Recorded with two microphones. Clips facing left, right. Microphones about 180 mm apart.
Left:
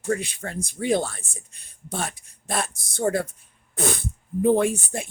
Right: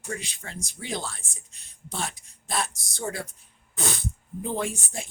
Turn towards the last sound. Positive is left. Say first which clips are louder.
# left 8 dB
turn(degrees=55)  # may be behind; listen again after turning